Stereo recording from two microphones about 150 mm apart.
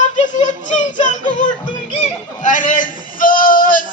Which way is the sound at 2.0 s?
55° left (ahead or behind).